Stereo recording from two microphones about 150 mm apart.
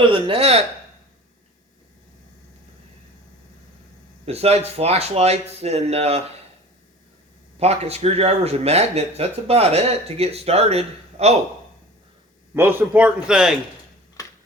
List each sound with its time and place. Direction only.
0.1 s speech: 40° right (ahead or behind)
4.3 s speech: 45° right (ahead or behind)
7.6 s speech: 45° right (ahead or behind)
12.5 s a man's voice: 15° right (ahead or behind)